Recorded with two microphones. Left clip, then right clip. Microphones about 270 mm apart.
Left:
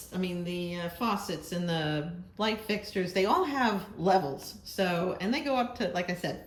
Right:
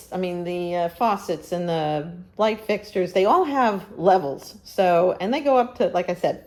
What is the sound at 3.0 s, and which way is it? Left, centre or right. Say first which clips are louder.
Speech: right 8 dB; right.